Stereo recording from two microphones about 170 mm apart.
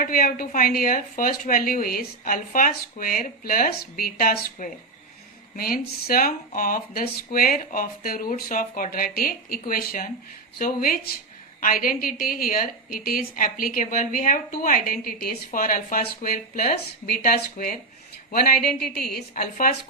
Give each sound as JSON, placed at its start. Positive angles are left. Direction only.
{"t": 0.0, "sound": "a woman's voice", "side_deg": 55}
{"t": 19.1, "sound": "a woman's voice", "side_deg": 55}